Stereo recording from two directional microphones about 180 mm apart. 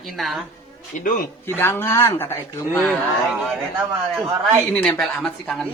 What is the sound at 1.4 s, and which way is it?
A man's voice, 15° left (ahead or behind).